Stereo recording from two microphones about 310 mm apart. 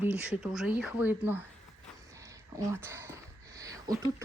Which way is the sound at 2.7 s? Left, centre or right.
Centre.